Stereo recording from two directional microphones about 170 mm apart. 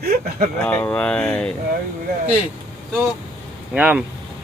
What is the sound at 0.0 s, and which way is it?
Speech, 70° right (ahead or behind).